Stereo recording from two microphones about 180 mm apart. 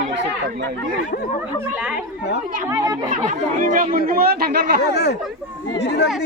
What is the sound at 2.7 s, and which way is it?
Speech, 20° right (ahead or behind).